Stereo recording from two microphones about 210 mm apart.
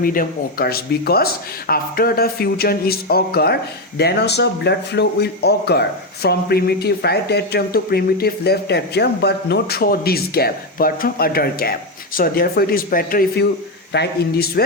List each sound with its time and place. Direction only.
0.0 s speech: 45° left (ahead or behind)